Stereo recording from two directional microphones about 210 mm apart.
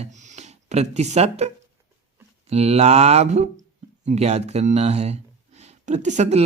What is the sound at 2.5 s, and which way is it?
Speech, 30° right (ahead or behind).